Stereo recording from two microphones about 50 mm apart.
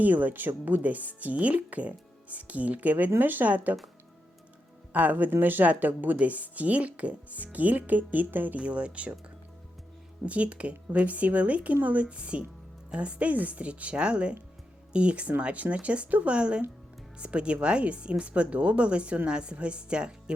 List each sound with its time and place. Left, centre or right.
0.0 s speech: right
4.9 s speech: right
8.5 s speech: right
10.2 s speech: right